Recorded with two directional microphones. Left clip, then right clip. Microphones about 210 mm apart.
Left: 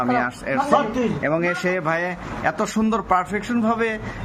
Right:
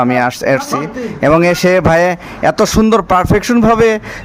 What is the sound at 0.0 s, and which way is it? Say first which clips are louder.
A man's voice: right 9 dB; 50° right (ahead or behind).